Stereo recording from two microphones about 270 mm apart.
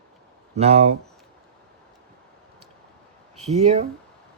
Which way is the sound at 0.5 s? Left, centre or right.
Right.